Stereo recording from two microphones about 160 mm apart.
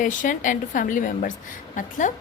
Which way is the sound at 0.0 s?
55° left (ahead or behind).